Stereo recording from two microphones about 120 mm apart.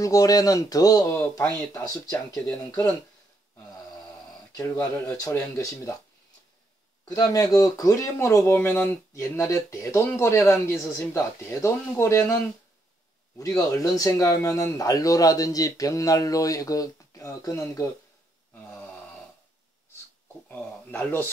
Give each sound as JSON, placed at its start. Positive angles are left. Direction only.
{"t": 0.0, "sound": "speech", "side_deg": 30}
{"t": 4.6, "sound": "speech", "side_deg": 25}
{"t": 7.1, "sound": "speech", "side_deg": 30}
{"t": 13.4, "sound": "speech", "side_deg": 30}
{"t": 18.5, "sound": "a sound", "side_deg": 10}
{"t": 20.4, "sound": "speech", "side_deg": 15}